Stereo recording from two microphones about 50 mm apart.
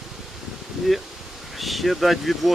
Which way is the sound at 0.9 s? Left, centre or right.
Centre.